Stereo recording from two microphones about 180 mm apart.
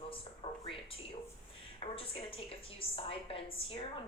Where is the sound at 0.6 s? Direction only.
30° left (ahead or behind).